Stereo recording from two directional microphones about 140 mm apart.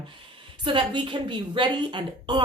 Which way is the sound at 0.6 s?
35° right (ahead or behind).